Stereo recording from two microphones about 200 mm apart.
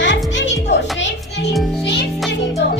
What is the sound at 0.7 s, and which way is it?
Music, 60° left (ahead or behind).